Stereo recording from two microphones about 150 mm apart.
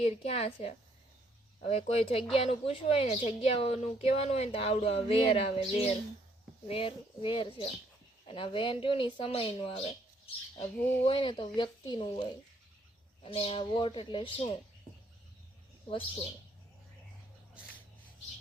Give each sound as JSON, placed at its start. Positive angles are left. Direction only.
{"t": 0.0, "sound": "a woman's voice", "side_deg": 40}
{"t": 10.8, "sound": "speech", "side_deg": 10}
{"t": 11.0, "sound": "a woman's voice", "side_deg": 35}